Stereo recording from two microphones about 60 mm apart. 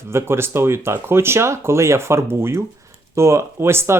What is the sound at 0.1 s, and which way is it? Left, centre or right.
Speech, right.